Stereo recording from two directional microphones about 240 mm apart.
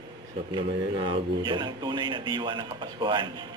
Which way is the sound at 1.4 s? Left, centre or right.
Centre.